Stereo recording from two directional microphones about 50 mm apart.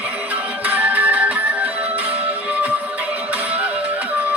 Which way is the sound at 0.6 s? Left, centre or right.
Right.